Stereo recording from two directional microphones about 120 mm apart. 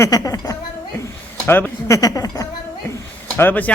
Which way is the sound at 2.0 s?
30° left (ahead or behind).